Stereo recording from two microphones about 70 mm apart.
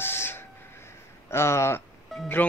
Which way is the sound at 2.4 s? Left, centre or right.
Left.